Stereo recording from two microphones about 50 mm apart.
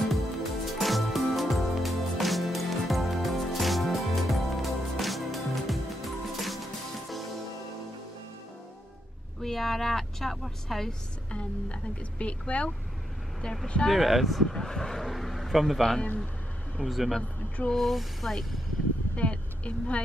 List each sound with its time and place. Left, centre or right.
0.1 s music: centre
9.4 s a sound: centre
10.9 s a woman's voice: left
13.8 s speech: centre
19.1 s a woman's voice: left